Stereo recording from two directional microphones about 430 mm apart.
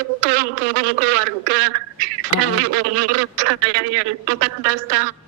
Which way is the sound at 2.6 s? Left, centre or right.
Right.